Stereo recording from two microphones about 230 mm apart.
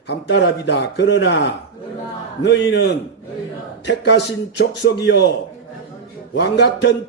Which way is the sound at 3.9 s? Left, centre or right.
Left.